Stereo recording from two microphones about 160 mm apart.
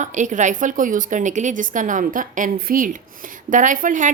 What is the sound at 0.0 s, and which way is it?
A woman's voice, 50° right (ahead or behind).